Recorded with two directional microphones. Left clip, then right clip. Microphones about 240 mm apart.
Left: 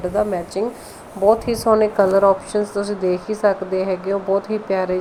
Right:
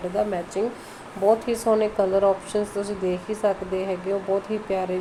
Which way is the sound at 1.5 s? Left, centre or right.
Centre.